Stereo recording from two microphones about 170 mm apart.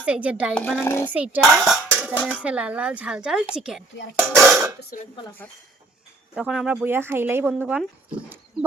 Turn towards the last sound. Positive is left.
turn(degrees=-10)  # may be behind; listen again after turning